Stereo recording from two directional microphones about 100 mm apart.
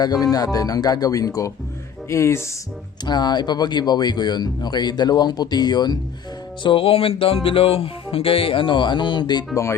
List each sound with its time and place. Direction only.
0.0 s speech: 40° left (ahead or behind)
3.1 s speech: 45° left (ahead or behind)
6.6 s music: 60° left (ahead or behind)